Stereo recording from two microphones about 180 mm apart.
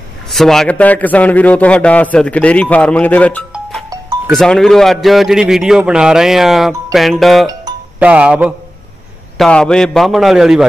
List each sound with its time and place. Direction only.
0.3 s a man's voice: centre (ahead or behind)
7.7 s music: 20° right (ahead or behind)
8.0 s speech: 5° right (ahead or behind)
9.4 s a man's voice: 5° left (ahead or behind)